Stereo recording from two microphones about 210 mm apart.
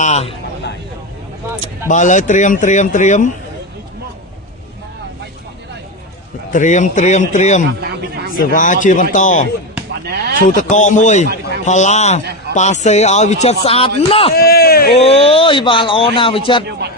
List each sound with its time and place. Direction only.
0.0 s speech: 30° left (ahead or behind)
1.9 s speech: 35° left (ahead or behind)
6.5 s speech: 35° left (ahead or behind)
7.8 s a sound: 50° right (ahead or behind)
8.4 s speech: 40° left (ahead or behind)
10.1 s speech: 50° right (ahead or behind)
10.4 s speech: 35° left (ahead or behind)
14.3 s a sound: 45° left (ahead or behind)
14.9 s speech: 30° left (ahead or behind)